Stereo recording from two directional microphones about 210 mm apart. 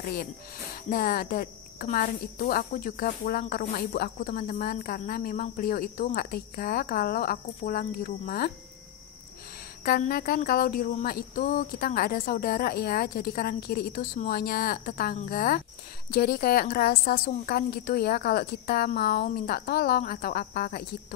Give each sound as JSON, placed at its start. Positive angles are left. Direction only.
{"t": 0.8, "sound": "a woman's voice", "side_deg": 45}
{"t": 9.8, "sound": "a woman's voice", "side_deg": 45}